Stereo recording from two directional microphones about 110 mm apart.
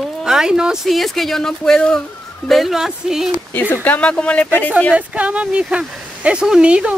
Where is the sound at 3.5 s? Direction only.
15° left (ahead or behind).